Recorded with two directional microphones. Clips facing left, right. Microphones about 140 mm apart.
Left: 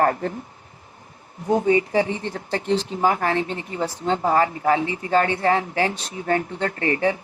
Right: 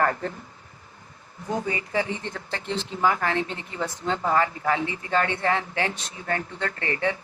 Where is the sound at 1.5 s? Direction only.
25° left (ahead or behind).